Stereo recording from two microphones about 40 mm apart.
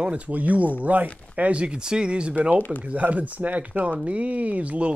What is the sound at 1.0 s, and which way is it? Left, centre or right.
Speech, left.